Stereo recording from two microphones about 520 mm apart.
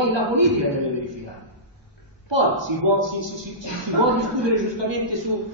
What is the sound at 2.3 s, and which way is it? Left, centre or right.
A woman's voice, right.